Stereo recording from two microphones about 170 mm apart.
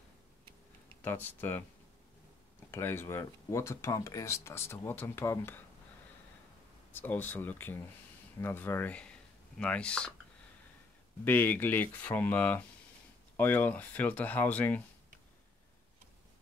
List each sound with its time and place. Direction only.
0.8 s speech: 10° left (ahead or behind)
2.7 s speech: 15° left (ahead or behind)
6.9 s speech: 10° left (ahead or behind)
11.2 s speech: 10° left (ahead or behind)